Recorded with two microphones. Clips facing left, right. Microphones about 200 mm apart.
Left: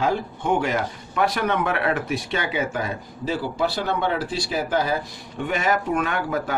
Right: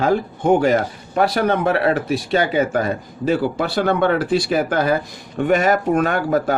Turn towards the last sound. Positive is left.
turn(degrees=-40)  # may be behind; listen again after turning